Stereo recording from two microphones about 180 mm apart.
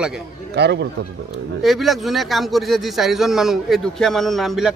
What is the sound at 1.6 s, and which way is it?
A man's voice, centre (ahead or behind).